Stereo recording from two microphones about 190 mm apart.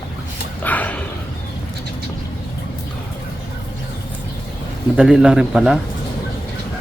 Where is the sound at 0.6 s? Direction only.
10° left (ahead or behind).